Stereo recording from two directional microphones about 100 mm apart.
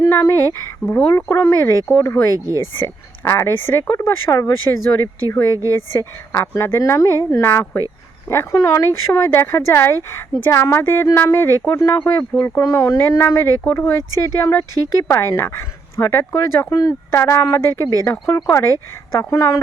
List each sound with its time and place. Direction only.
0.1 s speech: 30° left (ahead or behind)
11.9 s speech: 15° left (ahead or behind)
12.4 s speech: 30° left (ahead or behind)